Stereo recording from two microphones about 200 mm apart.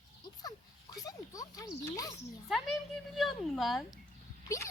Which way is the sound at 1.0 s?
20° left (ahead or behind).